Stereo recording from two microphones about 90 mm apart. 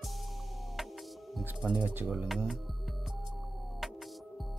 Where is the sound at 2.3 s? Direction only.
Centre (ahead or behind).